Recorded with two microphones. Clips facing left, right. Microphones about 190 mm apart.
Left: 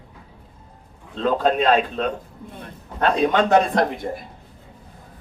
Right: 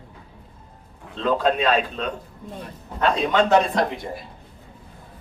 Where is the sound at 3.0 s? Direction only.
50° left (ahead or behind).